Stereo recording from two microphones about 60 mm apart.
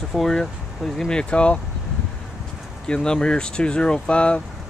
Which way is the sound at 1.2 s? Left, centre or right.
Centre.